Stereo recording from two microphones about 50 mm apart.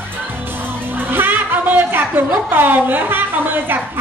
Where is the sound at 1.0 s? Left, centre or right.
Right.